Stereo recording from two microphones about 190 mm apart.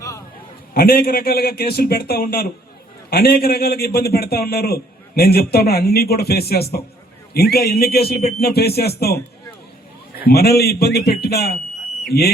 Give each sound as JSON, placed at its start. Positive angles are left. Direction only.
{"t": 0.7, "sound": "a man's voice", "side_deg": 55}
{"t": 10.2, "sound": "a man's voice", "side_deg": 55}